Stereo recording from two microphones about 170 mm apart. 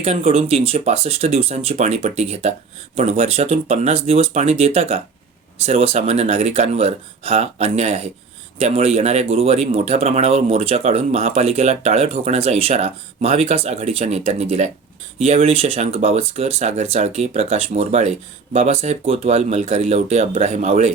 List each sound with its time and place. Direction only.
0.0 s speech: 35° right (ahead or behind)